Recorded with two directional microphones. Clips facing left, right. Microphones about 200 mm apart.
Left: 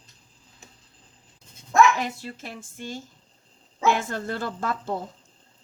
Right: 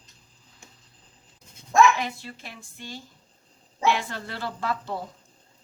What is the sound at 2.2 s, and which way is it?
Speech, 45° left (ahead or behind).